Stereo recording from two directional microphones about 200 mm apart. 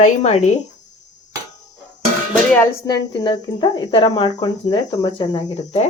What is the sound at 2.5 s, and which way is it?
Speech, 15° left (ahead or behind).